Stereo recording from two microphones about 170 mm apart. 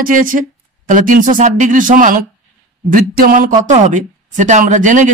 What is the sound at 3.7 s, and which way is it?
Speech, 45° right (ahead or behind).